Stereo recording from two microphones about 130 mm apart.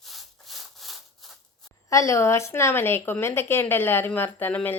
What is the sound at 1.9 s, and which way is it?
Speech, 25° left (ahead or behind).